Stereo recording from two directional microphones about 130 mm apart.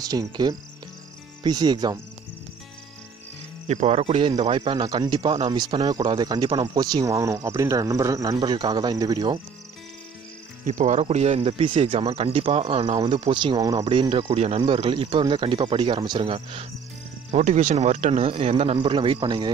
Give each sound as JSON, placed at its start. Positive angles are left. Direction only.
{"t": 0.0, "sound": "speech", "side_deg": -30}
{"t": 3.6, "sound": "speech", "side_deg": -60}
{"t": 4.7, "sound": "speech", "side_deg": -30}
{"t": 10.6, "sound": "speech", "side_deg": -70}
{"t": 13.8, "sound": "speech", "side_deg": -40}
{"t": 14.2, "sound": "speech", "side_deg": -55}
{"t": 14.7, "sound": "speech", "side_deg": -45}
{"t": 17.3, "sound": "speech", "side_deg": -65}
{"t": 18.2, "sound": "speech", "side_deg": -50}